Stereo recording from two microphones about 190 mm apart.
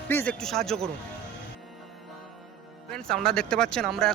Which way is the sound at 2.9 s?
Centre (ahead or behind).